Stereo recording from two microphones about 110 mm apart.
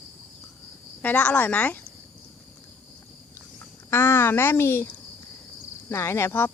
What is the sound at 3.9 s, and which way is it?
Speech, 20° left (ahead or behind).